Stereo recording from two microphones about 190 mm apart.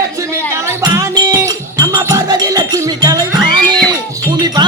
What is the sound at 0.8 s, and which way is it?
Music, 20° right (ahead or behind).